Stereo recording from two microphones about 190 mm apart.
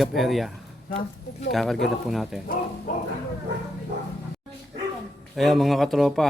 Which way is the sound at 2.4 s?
50° left (ahead or behind).